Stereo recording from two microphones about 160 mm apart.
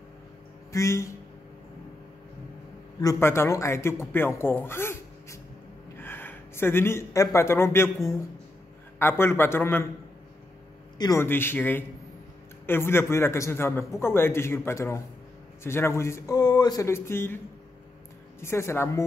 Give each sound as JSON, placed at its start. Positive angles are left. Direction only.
{"t": 0.7, "sound": "a man's voice", "side_deg": 20}
{"t": 3.0, "sound": "a man's voice", "side_deg": 20}
{"t": 11.0, "sound": "a man's voice", "side_deg": 25}
{"t": 11.2, "sound": "a man's voice", "side_deg": 15}
{"t": 18.4, "sound": "a man's voice", "side_deg": 15}